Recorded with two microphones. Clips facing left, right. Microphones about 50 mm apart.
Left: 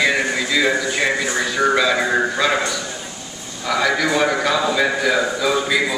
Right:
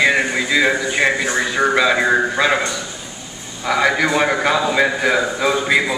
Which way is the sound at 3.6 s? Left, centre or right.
Right.